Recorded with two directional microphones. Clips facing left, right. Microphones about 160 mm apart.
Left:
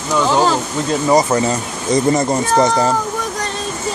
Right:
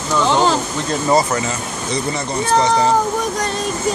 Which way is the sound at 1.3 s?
40° left (ahead or behind).